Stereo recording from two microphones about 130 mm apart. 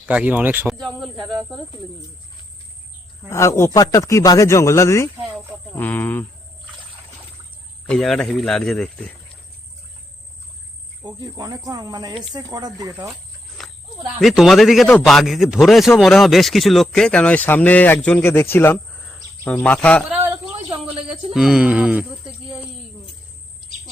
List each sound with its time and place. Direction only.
0.0 s speech: 10° right (ahead or behind)
0.9 s speech: centre (ahead or behind)
3.2 s speech: 20° left (ahead or behind)
7.9 s speech: 5° left (ahead or behind)
11.0 s speech: 30° right (ahead or behind)
13.6 s snake: centre (ahead or behind)
14.2 s speech: centre (ahead or behind)
21.3 s speech: 5° right (ahead or behind)